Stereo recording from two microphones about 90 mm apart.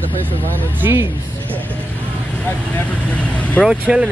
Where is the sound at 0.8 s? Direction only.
30° right (ahead or behind).